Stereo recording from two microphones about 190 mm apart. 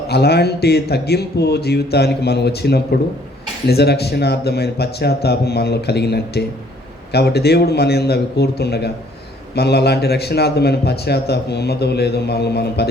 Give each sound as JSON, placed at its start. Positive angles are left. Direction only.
{"t": 0.1, "sound": "speech", "side_deg": 60}